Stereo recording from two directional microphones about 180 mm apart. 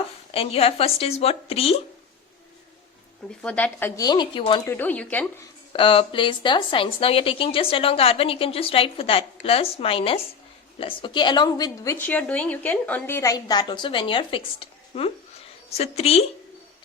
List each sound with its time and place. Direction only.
0.3 s a woman's voice: 35° left (ahead or behind)
3.4 s a woman's voice: 10° left (ahead or behind); by 4.6 s 25° left (ahead or behind)
4.6 s speech: 10° left (ahead or behind)
5.7 s a woman's voice: 30° left (ahead or behind)